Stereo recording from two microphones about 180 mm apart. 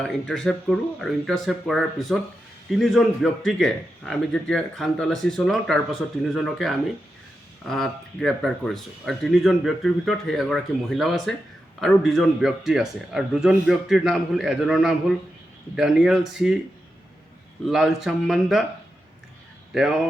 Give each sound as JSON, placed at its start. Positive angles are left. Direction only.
{"t": 0.0, "sound": "speech", "side_deg": 5}
{"t": 17.7, "sound": "speech", "side_deg": 0}
{"t": 19.7, "sound": "speech", "side_deg": -5}